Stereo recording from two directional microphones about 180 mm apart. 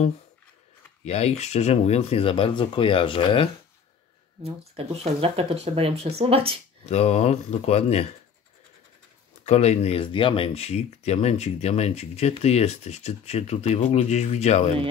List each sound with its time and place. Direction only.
1.0 s speech: 35° left (ahead or behind)
4.4 s speech: 35° right (ahead or behind)
6.9 s speech: 35° left (ahead or behind)
9.5 s speech: 35° left (ahead or behind)